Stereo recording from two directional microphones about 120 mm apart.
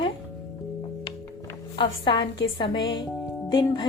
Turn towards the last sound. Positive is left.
turn(degrees=40)  # may be behind; listen again after turning